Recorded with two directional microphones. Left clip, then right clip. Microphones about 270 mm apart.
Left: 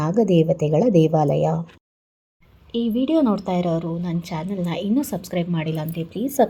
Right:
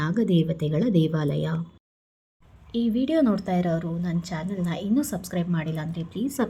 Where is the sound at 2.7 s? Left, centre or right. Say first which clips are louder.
Left 3 dB; centre.